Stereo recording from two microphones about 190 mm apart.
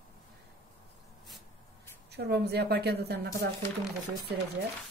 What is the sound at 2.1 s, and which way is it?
A woman's voice, 60° right (ahead or behind).